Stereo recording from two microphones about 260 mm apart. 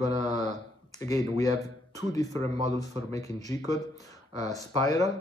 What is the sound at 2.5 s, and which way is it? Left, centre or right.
Speech, right.